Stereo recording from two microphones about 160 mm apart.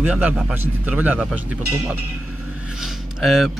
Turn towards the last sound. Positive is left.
turn(degrees=-5)  # may be behind; listen again after turning